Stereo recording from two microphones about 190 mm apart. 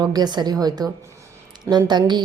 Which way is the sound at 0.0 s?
20° right (ahead or behind).